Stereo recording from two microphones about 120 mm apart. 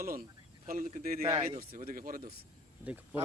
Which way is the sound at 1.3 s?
30° right (ahead or behind).